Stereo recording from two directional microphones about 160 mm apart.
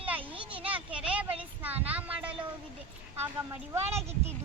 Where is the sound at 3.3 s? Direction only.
15° right (ahead or behind).